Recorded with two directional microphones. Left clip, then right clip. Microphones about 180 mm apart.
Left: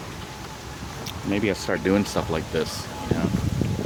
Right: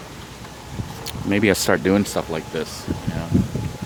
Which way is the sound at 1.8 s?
25° right (ahead or behind).